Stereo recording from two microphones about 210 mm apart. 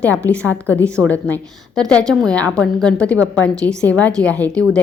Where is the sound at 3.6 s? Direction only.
15° right (ahead or behind).